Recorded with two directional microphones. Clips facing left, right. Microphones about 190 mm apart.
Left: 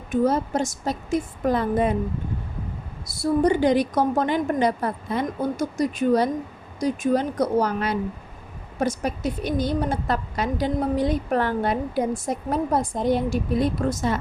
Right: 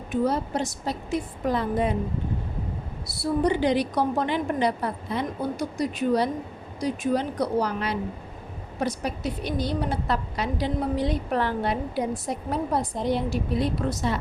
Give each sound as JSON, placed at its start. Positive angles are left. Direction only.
{"t": 0.1, "sound": "a woman's voice", "side_deg": 45}
{"t": 3.1, "sound": "a woman's voice", "side_deg": 45}